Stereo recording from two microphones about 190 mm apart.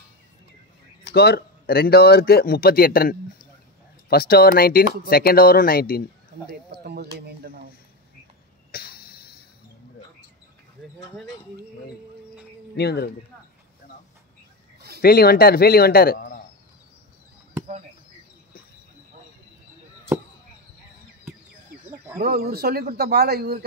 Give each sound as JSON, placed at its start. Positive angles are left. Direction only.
{"t": 1.1, "sound": "speech", "side_deg": 55}
{"t": 6.8, "sound": "speech", "side_deg": -55}
{"t": 8.7, "sound": "a sound", "side_deg": 55}
{"t": 12.7, "sound": "speech", "side_deg": 60}
{"t": 15.0, "sound": "speech", "side_deg": 55}
{"t": 22.2, "sound": "a man's voice", "side_deg": -55}